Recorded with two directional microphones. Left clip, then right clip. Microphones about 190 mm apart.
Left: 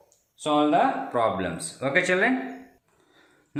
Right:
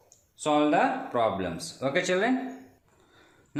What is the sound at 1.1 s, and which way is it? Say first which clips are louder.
Speech: left 2 dB; 10° right (ahead or behind).